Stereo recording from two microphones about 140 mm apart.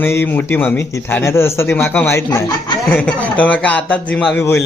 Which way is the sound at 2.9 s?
10° left (ahead or behind).